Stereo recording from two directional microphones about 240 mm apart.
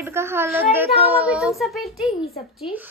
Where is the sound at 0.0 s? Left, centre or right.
Centre.